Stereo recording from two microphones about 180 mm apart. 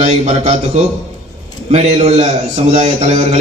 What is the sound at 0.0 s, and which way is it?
A man's voice, 35° right (ahead or behind).